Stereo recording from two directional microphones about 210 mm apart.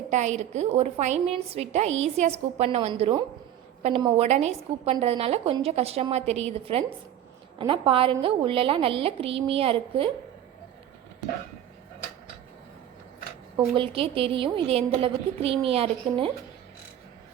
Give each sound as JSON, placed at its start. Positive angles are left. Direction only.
{"t": 0.1, "sound": "a woman's voice", "side_deg": -35}
{"t": 13.7, "sound": "a woman's voice", "side_deg": -25}